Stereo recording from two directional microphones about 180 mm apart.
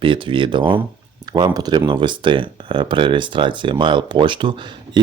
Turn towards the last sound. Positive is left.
turn(degrees=-25)  # may be behind; listen again after turning